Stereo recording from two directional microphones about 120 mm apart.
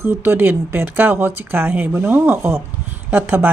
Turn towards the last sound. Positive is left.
turn(degrees=-15)  # may be behind; listen again after turning